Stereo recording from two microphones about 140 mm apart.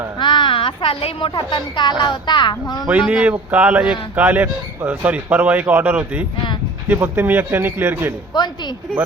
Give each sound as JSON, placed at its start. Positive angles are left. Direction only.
{"t": 0.2, "sound": "a woman's voice", "side_deg": 35}
{"t": 2.8, "sound": "a man's voice", "side_deg": -5}